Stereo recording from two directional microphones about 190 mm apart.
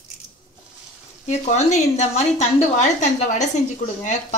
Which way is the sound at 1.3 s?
35° left (ahead or behind).